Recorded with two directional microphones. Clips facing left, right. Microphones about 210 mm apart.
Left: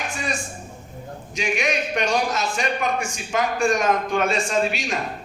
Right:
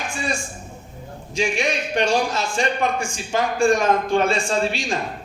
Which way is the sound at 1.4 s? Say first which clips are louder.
Right 2 dB; 30° right (ahead or behind).